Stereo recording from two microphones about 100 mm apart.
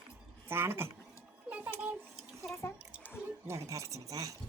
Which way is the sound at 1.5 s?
15° right (ahead or behind).